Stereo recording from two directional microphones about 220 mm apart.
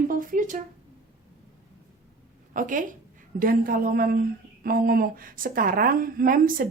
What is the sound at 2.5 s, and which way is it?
A woman's voice, 35° right (ahead or behind).